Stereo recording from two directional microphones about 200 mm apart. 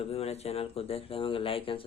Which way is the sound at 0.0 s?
30° left (ahead or behind).